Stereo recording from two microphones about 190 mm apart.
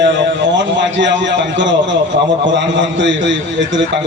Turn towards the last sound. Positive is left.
turn(degrees=-70)  # may be behind; listen again after turning